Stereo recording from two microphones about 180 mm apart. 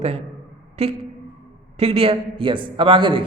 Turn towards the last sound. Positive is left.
turn(degrees=-30)  # may be behind; listen again after turning